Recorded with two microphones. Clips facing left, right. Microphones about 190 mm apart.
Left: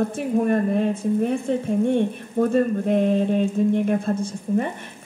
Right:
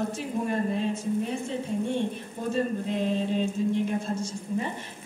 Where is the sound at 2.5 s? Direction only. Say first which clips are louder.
Left 5 dB; 55° left (ahead or behind).